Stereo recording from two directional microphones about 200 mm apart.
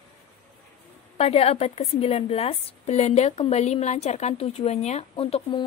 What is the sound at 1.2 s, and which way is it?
A woman's voice, 30° left (ahead or behind).